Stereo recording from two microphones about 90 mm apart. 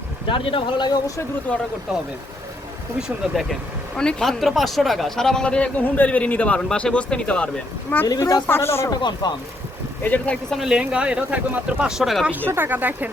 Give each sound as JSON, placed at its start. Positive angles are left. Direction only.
{"t": 0.3, "sound": "speech", "side_deg": 75}
{"t": 0.9, "sound": "speech", "side_deg": 40}
{"t": 3.9, "sound": "speech", "side_deg": 5}
{"t": 8.0, "sound": "speech", "side_deg": 40}
{"t": 8.4, "sound": "speech", "side_deg": 25}
{"t": 8.9, "sound": "speech", "side_deg": 55}
{"t": 10.0, "sound": "speech", "side_deg": 20}
{"t": 10.5, "sound": "speech", "side_deg": -5}
{"t": 11.9, "sound": "speech", "side_deg": -5}
{"t": 12.5, "sound": "speech", "side_deg": -20}